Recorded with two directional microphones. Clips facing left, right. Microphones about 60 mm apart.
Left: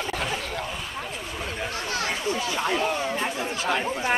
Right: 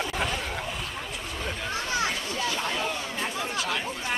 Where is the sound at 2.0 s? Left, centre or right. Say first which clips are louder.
Left 2 dB; left.